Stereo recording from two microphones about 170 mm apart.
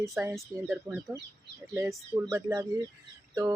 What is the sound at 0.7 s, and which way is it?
Speech, 15° right (ahead or behind).